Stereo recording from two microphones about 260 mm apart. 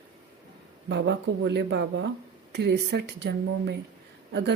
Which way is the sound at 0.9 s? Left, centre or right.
Right.